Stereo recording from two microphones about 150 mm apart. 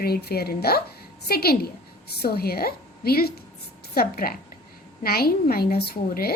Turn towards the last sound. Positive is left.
turn(degrees=90)